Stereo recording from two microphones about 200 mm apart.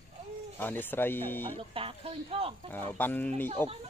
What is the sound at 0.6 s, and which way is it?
Speech, 10° left (ahead or behind).